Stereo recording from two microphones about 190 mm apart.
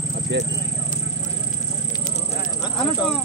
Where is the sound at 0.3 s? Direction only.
65° right (ahead or behind).